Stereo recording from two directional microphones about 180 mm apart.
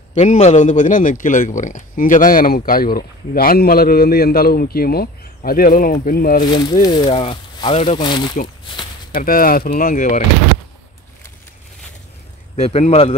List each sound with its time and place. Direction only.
0.1 s a man's voice: 40° left (ahead or behind)
6.4 s speech: 25° left (ahead or behind)
9.1 s a man's voice: 50° left (ahead or behind)
12.5 s a man's voice: 35° left (ahead or behind)